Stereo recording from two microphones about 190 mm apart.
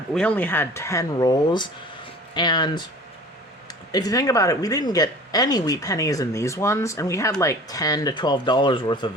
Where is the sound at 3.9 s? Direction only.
20° left (ahead or behind).